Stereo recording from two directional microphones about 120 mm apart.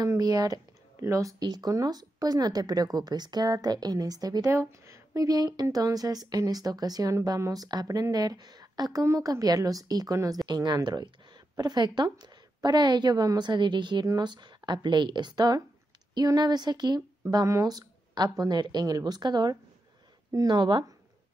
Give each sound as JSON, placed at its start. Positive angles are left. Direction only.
{"t": 0.0, "sound": "speech", "side_deg": -30}